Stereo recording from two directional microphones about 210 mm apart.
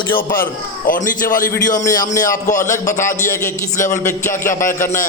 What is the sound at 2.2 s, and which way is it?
Speech, 40° left (ahead or behind).